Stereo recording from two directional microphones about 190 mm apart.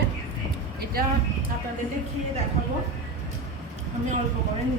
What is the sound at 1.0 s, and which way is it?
Speech, 55° right (ahead or behind).